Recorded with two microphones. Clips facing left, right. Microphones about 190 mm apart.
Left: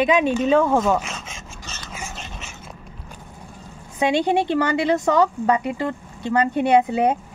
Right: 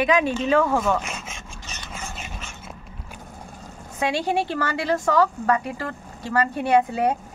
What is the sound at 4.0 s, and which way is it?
A woman's voice, 20° left (ahead or behind).